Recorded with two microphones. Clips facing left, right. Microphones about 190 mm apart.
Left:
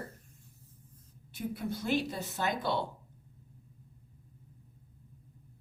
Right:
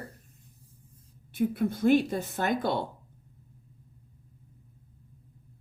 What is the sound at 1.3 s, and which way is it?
A woman's voice, 55° right (ahead or behind).